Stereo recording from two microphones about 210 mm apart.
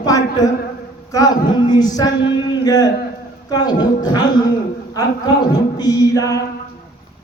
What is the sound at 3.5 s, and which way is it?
Speech, 20° left (ahead or behind).